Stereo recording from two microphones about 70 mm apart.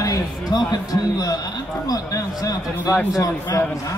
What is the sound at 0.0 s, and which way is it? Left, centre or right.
Speech, left.